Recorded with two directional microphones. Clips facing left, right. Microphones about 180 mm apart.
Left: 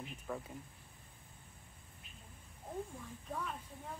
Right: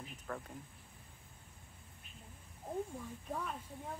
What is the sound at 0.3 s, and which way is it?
Speech, 10° left (ahead or behind).